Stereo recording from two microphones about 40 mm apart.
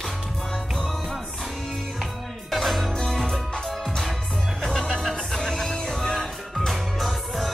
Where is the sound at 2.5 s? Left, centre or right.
Centre.